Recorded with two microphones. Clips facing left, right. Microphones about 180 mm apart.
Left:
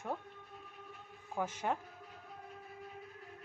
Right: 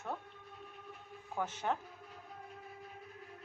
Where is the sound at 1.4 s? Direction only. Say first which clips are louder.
Even; 10° left (ahead or behind).